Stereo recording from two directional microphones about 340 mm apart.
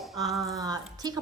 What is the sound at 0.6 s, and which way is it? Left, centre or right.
Speech, centre.